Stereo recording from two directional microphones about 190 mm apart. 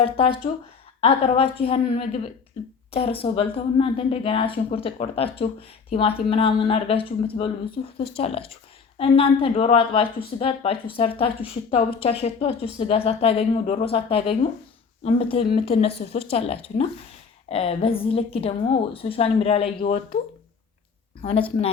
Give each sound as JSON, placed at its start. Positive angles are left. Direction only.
{"t": 0.0, "sound": "a woman's voice", "side_deg": 30}
{"t": 21.2, "sound": "speech", "side_deg": 30}